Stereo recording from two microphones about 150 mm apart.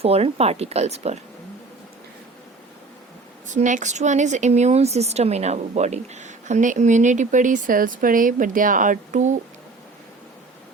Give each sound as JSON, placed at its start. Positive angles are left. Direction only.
{"t": 0.0, "sound": "speech", "side_deg": -40}
{"t": 3.4, "sound": "a woman's voice", "side_deg": -55}